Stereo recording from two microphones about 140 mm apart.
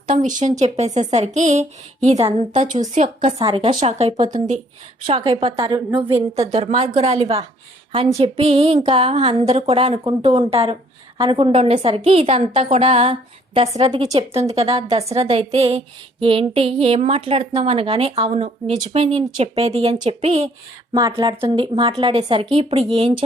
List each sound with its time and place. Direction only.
0.1 s speech: 65° right (ahead or behind)
3.3 s a woman's voice: 40° right (ahead or behind)
3.8 s speech: 50° right (ahead or behind)
5.0 s a woman's voice: 45° right (ahead or behind)
21.1 s a woman's voice: 35° right (ahead or behind)